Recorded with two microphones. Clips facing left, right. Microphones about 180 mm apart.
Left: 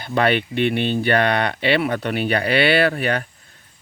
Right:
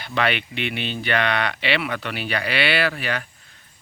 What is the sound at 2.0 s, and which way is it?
Speech, 50° left (ahead or behind).